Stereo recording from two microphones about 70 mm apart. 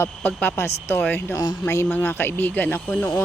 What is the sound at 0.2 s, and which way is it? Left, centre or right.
Speech, left.